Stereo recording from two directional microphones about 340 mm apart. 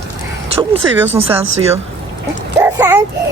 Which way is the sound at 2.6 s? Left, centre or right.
Centre.